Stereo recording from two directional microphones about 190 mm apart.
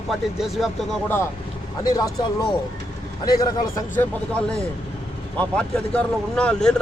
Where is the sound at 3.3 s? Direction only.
20° left (ahead or behind).